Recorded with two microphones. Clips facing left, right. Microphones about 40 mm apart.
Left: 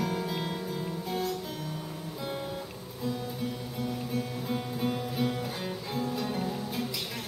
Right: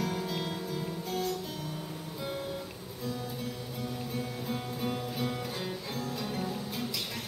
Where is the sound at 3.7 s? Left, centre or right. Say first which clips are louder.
Left 4 dB; centre.